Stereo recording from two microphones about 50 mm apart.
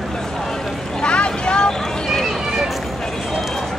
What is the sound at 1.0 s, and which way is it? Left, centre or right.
Vehicle, left.